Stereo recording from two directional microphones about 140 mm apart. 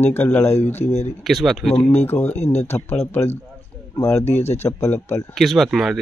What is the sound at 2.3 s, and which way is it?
Speech, 50° left (ahead or behind).